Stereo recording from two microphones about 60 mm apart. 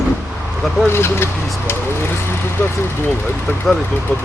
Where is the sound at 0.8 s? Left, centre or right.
Left.